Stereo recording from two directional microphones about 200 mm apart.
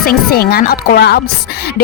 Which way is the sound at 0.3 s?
50° left (ahead or behind).